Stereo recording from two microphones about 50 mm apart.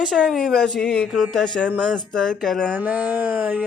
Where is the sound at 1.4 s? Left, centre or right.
Left.